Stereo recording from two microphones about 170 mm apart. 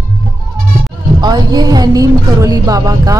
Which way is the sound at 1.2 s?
25° right (ahead or behind).